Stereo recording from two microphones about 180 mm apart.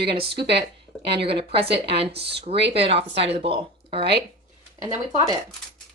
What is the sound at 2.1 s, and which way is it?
Speech, 65° right (ahead or behind).